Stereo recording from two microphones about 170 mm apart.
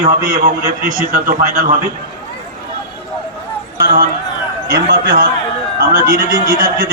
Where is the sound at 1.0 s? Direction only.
55° right (ahead or behind).